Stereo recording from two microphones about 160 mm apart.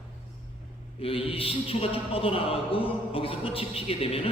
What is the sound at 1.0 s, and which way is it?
A man's voice, 35° left (ahead or behind).